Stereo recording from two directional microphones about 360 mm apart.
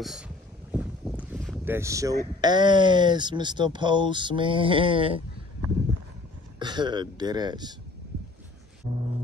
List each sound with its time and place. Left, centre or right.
0.7 s boat: centre
2.4 s speech: centre
6.6 s speech: centre
8.8 s speech: centre